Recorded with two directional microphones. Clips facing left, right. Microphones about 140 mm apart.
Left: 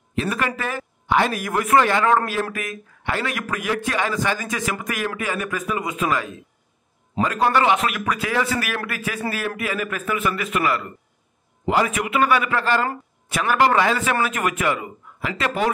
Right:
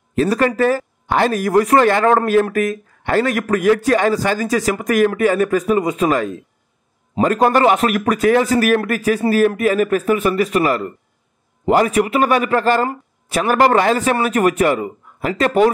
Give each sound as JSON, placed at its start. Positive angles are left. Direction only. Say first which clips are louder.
{"t": 0.1, "sound": "a man's voice", "louder": "right 8 dB", "side_deg": -40}